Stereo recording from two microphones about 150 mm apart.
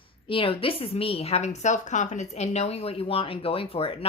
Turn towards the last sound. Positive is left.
turn(degrees=40)  # may be behind; listen again after turning